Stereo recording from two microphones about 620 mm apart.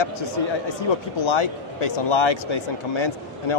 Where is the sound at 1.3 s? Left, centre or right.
Left.